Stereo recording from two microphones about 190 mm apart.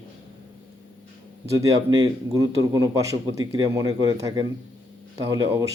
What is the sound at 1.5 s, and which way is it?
A man's voice, 20° right (ahead or behind).